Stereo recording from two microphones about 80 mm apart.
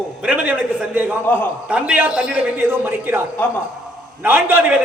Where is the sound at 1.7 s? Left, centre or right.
Centre.